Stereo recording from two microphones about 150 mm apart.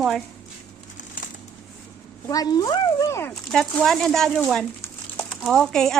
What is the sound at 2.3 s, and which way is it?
Speech, 25° left (ahead or behind).